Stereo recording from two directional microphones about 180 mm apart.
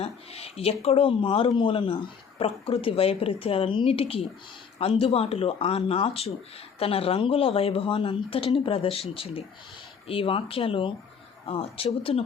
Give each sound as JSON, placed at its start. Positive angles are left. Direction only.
{"t": 0.0, "sound": "speech", "side_deg": 35}